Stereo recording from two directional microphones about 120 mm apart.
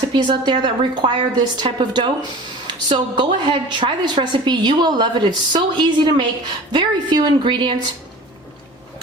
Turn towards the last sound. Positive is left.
turn(degrees=-40)  # may be behind; listen again after turning